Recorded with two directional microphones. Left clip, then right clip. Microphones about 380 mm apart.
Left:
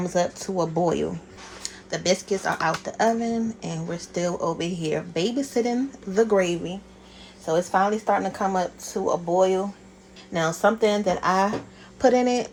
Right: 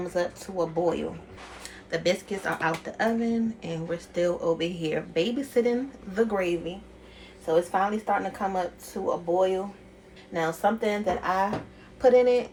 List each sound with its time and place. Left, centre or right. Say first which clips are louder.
0.1 s speech: left 6 dB; left